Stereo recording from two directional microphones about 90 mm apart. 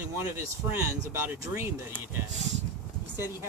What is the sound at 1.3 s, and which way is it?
Speech, 25° right (ahead or behind).